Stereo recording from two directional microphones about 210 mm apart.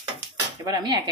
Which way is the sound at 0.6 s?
20° right (ahead or behind).